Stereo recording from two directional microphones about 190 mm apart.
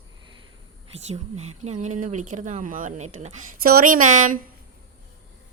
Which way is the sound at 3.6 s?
50° right (ahead or behind).